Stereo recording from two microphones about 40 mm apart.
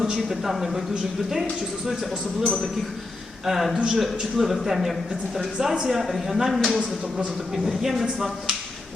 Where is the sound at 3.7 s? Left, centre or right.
Centre.